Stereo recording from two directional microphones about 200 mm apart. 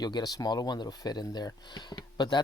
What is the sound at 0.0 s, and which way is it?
Speech, 20° left (ahead or behind).